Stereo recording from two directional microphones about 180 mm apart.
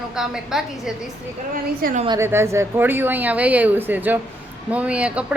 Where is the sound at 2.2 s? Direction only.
15° right (ahead or behind).